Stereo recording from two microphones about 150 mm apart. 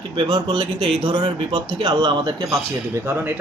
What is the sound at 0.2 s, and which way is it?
Speech, 35° right (ahead or behind).